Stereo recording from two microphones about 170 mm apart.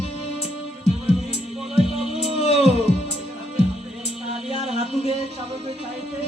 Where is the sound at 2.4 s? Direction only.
35° left (ahead or behind).